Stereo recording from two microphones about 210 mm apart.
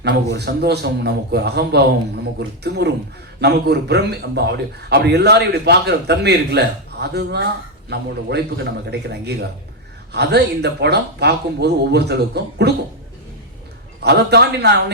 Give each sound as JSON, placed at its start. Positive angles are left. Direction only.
{"t": 0.0, "sound": "a man's voice", "side_deg": -50}
{"t": 14.0, "sound": "a man's voice", "side_deg": -50}